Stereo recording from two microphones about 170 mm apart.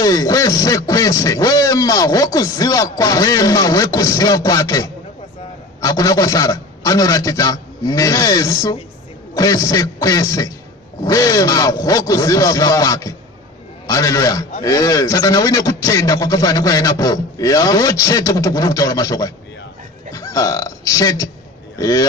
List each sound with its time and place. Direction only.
0.0 s speech: 20° left (ahead or behind)